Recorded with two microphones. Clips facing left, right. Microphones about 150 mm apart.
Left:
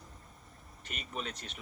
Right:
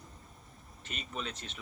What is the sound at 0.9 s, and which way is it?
Speech, 45° left (ahead or behind).